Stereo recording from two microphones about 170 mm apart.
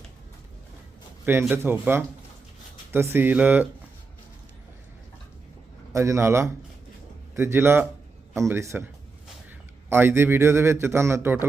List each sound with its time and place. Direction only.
1.2 s a man's voice: 10° right (ahead or behind)
5.9 s a man's voice: 15° right (ahead or behind)